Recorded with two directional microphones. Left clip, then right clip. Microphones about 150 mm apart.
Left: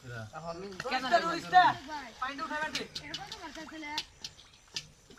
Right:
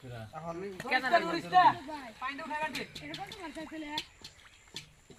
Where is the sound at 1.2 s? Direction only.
30° right (ahead or behind).